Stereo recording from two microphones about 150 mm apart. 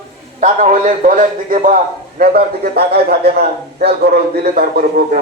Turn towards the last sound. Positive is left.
turn(degrees=-70)  # may be behind; listen again after turning